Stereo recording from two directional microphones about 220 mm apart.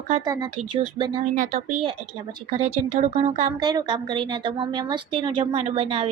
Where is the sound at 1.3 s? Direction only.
35° right (ahead or behind).